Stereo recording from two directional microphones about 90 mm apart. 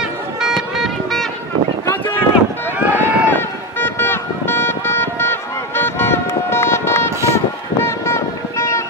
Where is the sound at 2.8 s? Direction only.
15° right (ahead or behind).